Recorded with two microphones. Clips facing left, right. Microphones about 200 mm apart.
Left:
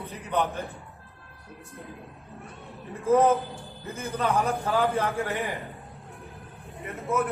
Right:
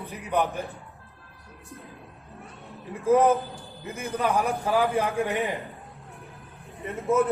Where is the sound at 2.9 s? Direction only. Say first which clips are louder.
Right 1 dB; 15° right (ahead or behind).